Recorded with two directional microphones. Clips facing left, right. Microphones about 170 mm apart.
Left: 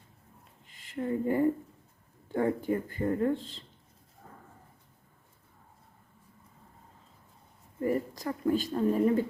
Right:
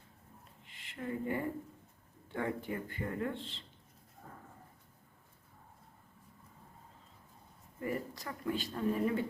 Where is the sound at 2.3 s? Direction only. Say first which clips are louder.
Left 9 dB; 40° left (ahead or behind).